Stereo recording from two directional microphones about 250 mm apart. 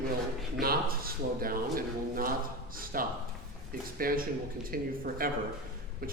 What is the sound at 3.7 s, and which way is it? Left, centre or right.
A man's voice, right.